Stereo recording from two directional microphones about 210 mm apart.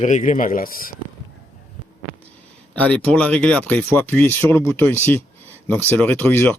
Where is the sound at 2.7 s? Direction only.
5° left (ahead or behind).